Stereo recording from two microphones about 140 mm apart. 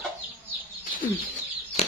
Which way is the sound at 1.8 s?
50° left (ahead or behind).